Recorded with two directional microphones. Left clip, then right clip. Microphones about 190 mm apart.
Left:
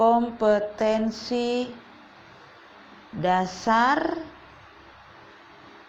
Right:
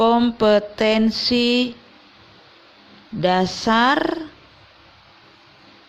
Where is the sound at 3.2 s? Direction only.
45° right (ahead or behind).